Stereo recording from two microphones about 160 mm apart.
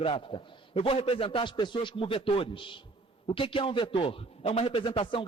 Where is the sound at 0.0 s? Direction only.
35° left (ahead or behind).